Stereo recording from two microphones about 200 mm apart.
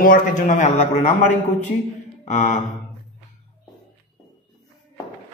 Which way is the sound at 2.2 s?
35° left (ahead or behind).